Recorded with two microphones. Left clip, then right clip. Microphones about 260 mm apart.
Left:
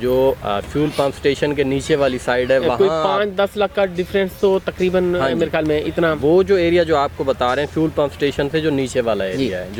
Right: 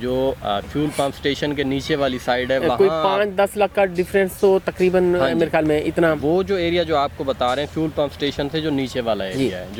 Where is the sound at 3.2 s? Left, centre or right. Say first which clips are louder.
Even; right.